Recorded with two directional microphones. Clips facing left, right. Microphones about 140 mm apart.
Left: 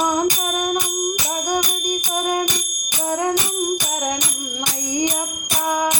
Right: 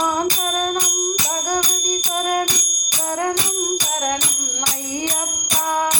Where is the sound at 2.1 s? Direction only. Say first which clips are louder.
Right 1 dB; 15° left (ahead or behind).